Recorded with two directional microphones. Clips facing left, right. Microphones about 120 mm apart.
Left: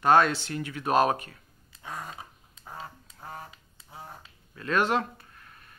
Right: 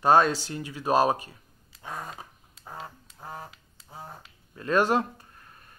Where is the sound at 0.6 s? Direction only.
15° right (ahead or behind).